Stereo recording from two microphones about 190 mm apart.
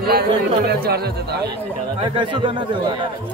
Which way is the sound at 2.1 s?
25° right (ahead or behind).